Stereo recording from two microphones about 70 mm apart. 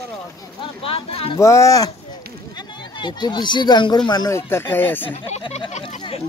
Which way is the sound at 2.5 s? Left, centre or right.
Left.